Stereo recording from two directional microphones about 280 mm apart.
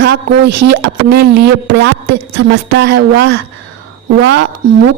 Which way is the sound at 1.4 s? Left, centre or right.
Right.